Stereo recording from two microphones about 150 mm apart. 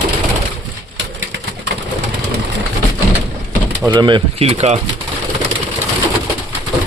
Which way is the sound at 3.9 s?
30° right (ahead or behind).